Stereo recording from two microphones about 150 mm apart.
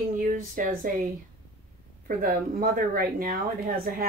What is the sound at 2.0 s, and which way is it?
Speech, 70° right (ahead or behind).